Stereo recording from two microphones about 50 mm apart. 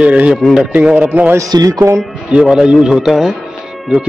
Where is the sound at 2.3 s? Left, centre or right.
Centre.